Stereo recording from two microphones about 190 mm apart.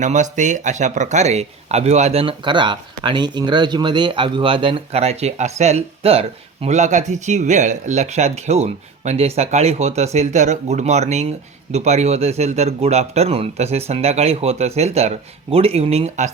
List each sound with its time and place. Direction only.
0.0 s speech: 40° right (ahead or behind)